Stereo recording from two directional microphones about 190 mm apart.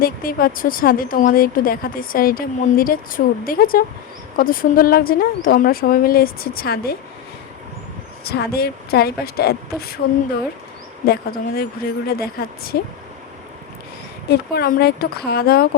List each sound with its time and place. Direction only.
0.0 s speech: 50° left (ahead or behind)
8.2 s a woman's voice: 55° left (ahead or behind)
11.0 s speech: 55° left (ahead or behind)
14.3 s a woman's voice: 55° left (ahead or behind)